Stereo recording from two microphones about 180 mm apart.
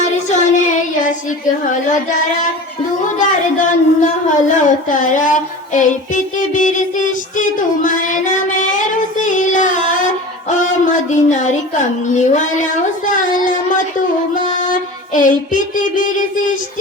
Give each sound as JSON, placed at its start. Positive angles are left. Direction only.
{"t": 0.0, "sound": "music", "side_deg": 40}
{"t": 1.5, "sound": "child singing", "side_deg": 45}
{"t": 3.2, "sound": "a woman's voice", "side_deg": 45}
{"t": 14.3, "sound": "child singing", "side_deg": 45}